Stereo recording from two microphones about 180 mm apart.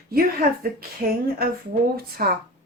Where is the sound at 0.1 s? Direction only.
55° right (ahead or behind).